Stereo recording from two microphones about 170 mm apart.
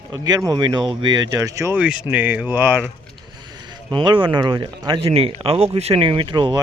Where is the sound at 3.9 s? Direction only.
30° right (ahead or behind).